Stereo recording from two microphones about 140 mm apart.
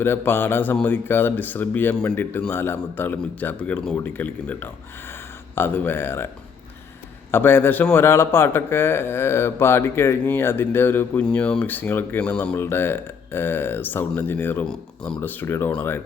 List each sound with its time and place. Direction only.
0.0 s a man's voice: 15° left (ahead or behind)
7.3 s a man's voice: 15° left (ahead or behind)